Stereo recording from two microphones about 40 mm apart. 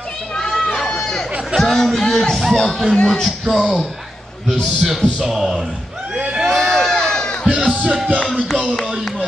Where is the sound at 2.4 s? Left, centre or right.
Centre.